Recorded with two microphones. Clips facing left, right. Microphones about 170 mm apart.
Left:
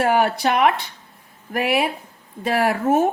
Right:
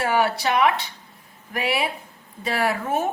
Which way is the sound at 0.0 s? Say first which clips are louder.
Left 3 dB; 50° left (ahead or behind).